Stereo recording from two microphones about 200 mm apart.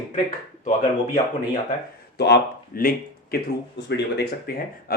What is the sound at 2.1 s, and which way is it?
Speech, 55° left (ahead or behind).